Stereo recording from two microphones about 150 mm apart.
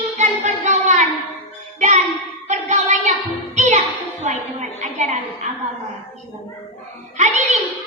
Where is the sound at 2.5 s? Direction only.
50° right (ahead or behind).